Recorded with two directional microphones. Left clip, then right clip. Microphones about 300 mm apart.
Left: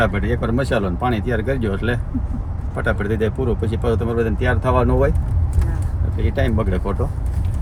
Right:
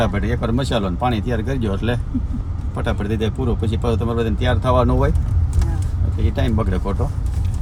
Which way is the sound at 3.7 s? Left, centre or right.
Centre.